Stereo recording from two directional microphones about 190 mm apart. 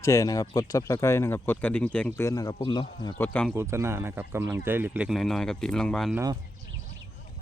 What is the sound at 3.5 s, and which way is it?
Speech, 15° right (ahead or behind).